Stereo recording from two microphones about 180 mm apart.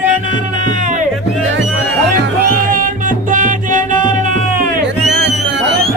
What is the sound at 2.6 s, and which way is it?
Music, 50° right (ahead or behind).